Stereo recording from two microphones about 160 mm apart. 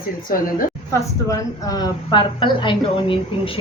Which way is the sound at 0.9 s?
20° left (ahead or behind).